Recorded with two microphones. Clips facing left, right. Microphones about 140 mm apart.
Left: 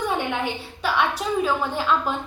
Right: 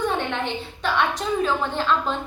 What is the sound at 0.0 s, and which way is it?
A woman's voice, 10° left (ahead or behind).